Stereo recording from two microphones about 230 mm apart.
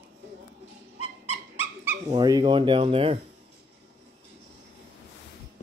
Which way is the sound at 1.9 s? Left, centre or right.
Centre.